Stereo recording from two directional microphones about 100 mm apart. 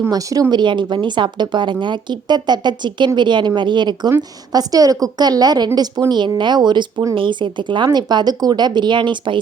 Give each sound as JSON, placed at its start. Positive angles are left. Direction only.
{"t": 0.1, "sound": "speech", "side_deg": -35}
{"t": 0.5, "sound": "a woman's voice", "side_deg": -50}
{"t": 4.5, "sound": "a woman's voice", "side_deg": -40}